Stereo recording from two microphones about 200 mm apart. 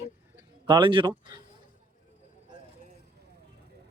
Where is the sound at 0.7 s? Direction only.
25° right (ahead or behind).